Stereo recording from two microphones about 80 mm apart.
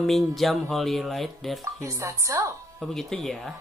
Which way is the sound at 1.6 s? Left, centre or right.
Right.